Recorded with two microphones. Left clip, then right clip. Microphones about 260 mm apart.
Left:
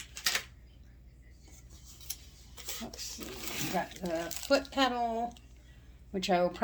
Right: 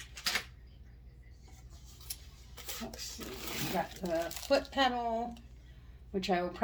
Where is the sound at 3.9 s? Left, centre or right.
Centre.